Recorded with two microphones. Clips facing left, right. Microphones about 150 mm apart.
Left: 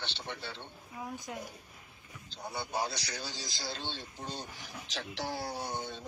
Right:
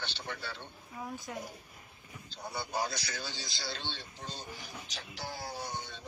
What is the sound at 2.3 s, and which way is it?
Speech, 20° left (ahead or behind).